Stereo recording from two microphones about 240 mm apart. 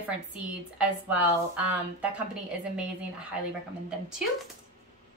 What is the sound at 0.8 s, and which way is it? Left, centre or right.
A woman's voice, centre.